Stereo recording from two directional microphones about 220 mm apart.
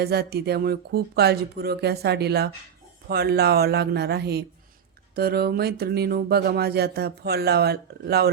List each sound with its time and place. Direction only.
0.0 s speech: 45° right (ahead or behind)